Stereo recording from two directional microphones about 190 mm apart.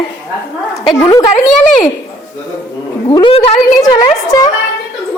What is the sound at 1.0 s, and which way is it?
Speech, 20° left (ahead or behind).